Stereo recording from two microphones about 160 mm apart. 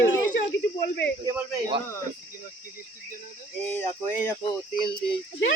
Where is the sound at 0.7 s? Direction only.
85° left.